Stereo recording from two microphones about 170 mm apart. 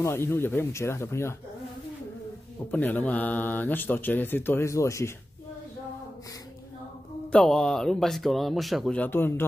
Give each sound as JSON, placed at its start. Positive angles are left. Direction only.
{"t": 0.0, "sound": "speech", "side_deg": 15}
{"t": 2.7, "sound": "speech", "side_deg": 10}
{"t": 7.3, "sound": "speech", "side_deg": 5}